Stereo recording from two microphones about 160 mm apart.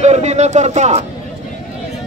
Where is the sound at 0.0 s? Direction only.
45° right (ahead or behind).